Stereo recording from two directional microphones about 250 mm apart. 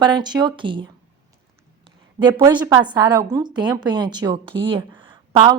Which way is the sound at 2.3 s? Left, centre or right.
Centre.